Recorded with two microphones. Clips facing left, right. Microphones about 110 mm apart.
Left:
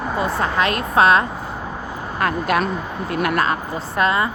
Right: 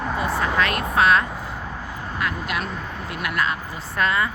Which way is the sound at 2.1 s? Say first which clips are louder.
Left 8 dB; 45° left (ahead or behind).